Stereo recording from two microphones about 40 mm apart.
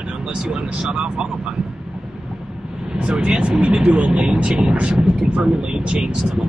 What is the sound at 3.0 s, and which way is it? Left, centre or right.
Speech, right.